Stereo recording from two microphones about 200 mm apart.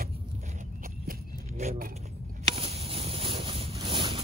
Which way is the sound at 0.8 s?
40° right (ahead or behind).